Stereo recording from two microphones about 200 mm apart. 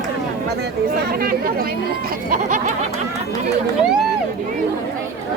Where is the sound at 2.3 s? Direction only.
40° right (ahead or behind).